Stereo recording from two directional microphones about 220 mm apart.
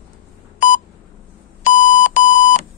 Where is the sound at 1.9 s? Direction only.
35° left (ahead or behind).